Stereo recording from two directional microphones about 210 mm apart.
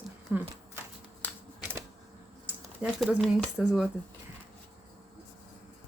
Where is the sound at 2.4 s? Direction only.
5° right (ahead or behind).